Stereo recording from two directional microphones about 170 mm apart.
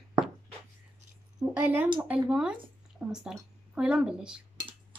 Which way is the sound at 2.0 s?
5° right (ahead or behind).